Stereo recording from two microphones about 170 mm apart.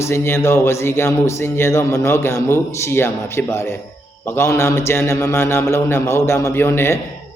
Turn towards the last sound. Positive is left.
turn(degrees=15)  # may be behind; listen again after turning